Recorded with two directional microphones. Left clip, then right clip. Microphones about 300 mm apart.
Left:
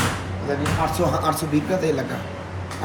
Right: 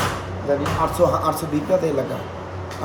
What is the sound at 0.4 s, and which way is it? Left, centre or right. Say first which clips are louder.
Speech: right 3 dB; centre.